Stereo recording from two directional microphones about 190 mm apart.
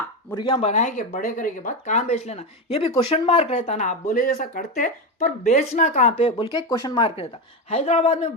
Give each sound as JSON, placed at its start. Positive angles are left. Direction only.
{"t": 0.3, "sound": "speech", "side_deg": 25}
{"t": 6.7, "sound": "speech", "side_deg": 20}